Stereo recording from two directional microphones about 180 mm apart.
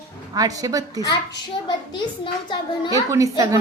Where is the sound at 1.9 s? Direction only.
25° left (ahead or behind).